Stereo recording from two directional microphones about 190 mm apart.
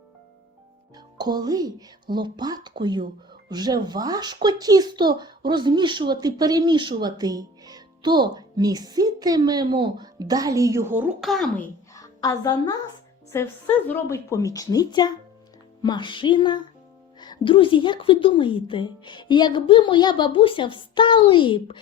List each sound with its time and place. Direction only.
0.9 s speech: 20° right (ahead or behind); by 11.6 s centre (ahead or behind)
11.9 s a woman's voice: 15° left (ahead or behind)